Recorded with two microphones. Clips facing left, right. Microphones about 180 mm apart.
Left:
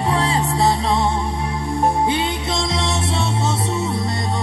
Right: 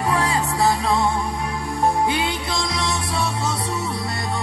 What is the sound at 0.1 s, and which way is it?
Music, 25° left (ahead or behind).